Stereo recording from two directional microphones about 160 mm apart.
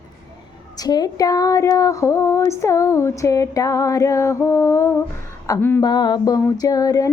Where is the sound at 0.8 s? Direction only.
25° left (ahead or behind).